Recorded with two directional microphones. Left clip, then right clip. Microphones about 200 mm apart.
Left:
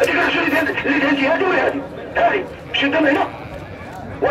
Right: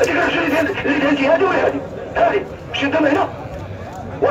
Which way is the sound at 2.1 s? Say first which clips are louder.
Right 1 dB; 40° right (ahead or behind).